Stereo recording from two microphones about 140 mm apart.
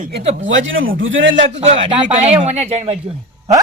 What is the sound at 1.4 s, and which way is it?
Speech, 50° right (ahead or behind).